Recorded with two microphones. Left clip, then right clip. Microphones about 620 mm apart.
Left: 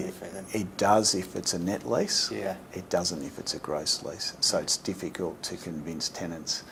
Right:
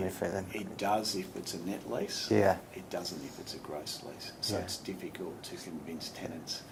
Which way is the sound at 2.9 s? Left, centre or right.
Left.